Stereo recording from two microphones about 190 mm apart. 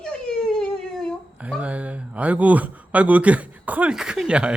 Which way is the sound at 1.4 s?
5° right (ahead or behind).